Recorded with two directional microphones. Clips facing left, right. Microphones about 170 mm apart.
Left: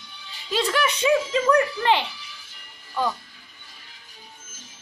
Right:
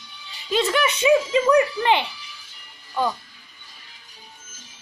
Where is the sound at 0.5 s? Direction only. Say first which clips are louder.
Right 2 dB; 5° right (ahead or behind).